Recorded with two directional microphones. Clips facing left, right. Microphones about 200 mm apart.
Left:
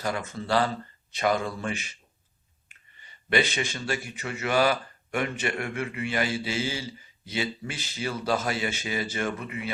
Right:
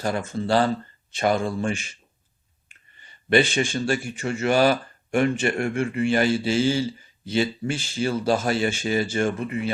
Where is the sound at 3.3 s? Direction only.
30° right (ahead or behind).